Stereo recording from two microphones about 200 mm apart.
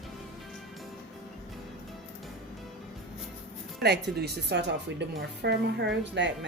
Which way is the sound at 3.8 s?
55° right (ahead or behind).